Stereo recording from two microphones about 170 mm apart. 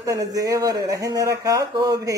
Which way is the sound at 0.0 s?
20° right (ahead or behind).